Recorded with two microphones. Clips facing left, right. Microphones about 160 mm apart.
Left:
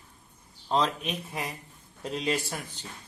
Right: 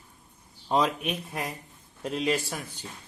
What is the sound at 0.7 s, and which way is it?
A man's voice, 10° right (ahead or behind).